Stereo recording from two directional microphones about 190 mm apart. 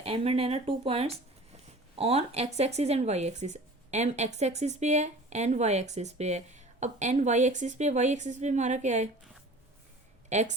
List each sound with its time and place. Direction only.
0.0 s speech: 30° right (ahead or behind)
10.2 s speech: 40° right (ahead or behind)